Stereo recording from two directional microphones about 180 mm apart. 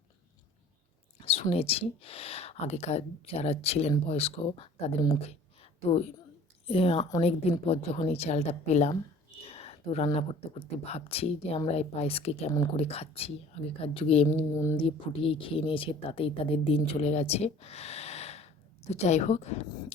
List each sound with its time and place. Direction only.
1.2 s speech: 35° left (ahead or behind)
5.2 s a sound: 35° left (ahead or behind)
6.7 s speech: 30° left (ahead or behind)
14.5 s speech: 15° left (ahead or behind)
14.8 s speech: 30° left (ahead or behind)